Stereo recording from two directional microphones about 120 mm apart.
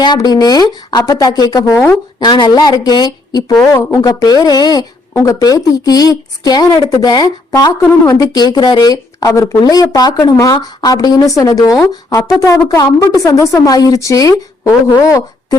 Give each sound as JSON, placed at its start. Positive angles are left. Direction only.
{"t": 0.0, "sound": "a woman's voice", "side_deg": 35}